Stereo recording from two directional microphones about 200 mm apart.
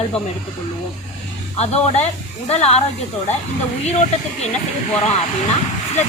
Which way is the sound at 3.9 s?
35° left (ahead or behind).